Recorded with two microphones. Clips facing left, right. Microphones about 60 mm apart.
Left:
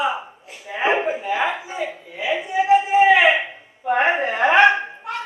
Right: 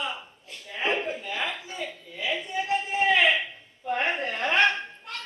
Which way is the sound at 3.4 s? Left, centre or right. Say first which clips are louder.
Left 7 dB; left.